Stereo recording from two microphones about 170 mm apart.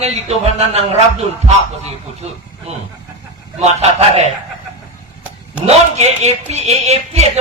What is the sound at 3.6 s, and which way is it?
Speech, 40° right (ahead or behind).